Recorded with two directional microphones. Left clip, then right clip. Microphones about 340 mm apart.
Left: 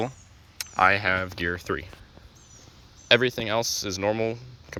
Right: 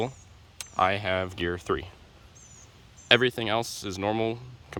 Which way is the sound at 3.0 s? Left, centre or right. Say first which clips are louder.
Left 1 dB; centre.